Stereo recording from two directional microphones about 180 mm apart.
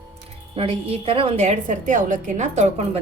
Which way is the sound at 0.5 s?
30° right (ahead or behind).